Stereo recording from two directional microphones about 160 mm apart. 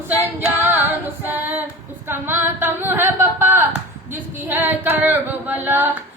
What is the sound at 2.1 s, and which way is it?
Singing, 15° right (ahead or behind).